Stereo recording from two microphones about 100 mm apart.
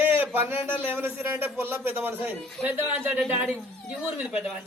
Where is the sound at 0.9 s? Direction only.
20° right (ahead or behind).